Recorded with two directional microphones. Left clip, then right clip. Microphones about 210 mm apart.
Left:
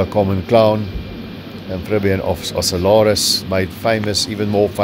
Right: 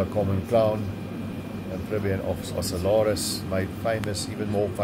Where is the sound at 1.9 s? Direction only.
50° left (ahead or behind).